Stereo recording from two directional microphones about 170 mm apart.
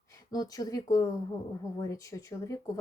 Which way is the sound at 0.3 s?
20° left (ahead or behind).